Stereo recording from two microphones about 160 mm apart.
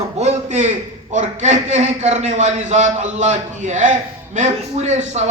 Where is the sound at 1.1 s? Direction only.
45° right (ahead or behind).